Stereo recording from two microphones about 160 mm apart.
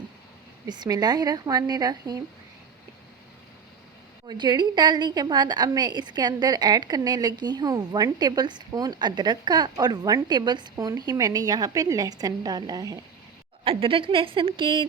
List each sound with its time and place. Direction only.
0.7 s a woman's voice: 25° right (ahead or behind)
4.3 s a woman's voice: 25° right (ahead or behind)
13.7 s a woman's voice: 35° right (ahead or behind)